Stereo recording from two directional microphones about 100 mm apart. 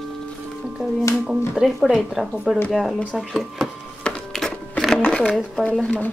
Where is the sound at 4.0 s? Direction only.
5° left (ahead or behind).